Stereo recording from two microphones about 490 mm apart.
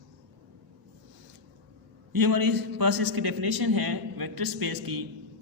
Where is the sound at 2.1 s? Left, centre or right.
Right.